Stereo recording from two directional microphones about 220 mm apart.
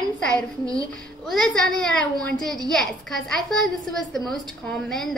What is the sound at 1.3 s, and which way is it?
A woman's voice, 5° left (ahead or behind).